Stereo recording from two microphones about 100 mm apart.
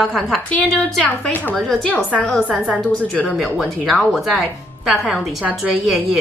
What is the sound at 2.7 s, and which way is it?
Speech, 15° left (ahead or behind).